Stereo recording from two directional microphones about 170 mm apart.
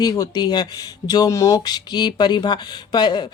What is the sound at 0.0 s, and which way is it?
Speech, 25° left (ahead or behind).